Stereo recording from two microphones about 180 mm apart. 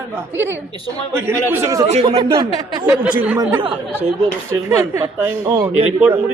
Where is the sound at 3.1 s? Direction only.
10° right (ahead or behind).